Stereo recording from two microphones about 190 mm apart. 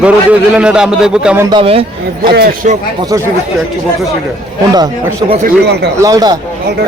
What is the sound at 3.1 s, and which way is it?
Speech, 15° right (ahead or behind).